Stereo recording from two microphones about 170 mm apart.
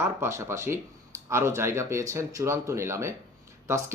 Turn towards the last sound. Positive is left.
turn(degrees=-15)  # may be behind; listen again after turning